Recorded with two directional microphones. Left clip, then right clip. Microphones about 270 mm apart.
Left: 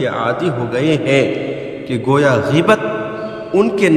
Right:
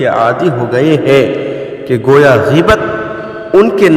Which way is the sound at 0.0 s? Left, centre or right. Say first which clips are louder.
Right 7 dB; centre.